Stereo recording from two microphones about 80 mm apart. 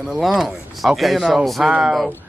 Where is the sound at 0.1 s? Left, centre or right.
Centre.